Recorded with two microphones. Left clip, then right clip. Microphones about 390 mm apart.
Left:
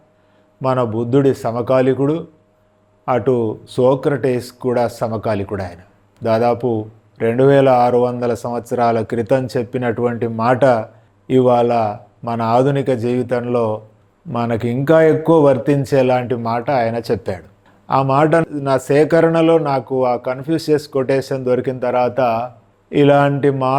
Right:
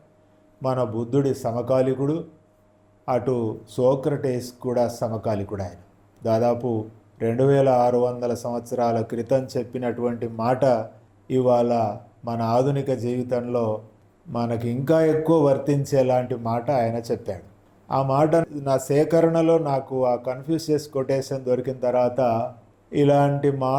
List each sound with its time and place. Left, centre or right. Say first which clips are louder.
0.6 s a man's voice: left 7 dB; left